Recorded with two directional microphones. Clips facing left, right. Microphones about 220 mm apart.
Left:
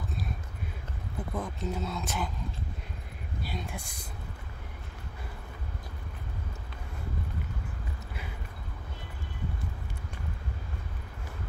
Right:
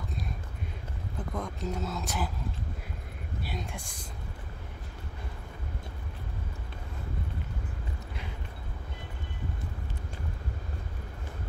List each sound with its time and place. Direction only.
1.3 s speech: centre (ahead or behind)
3.4 s speech: centre (ahead or behind)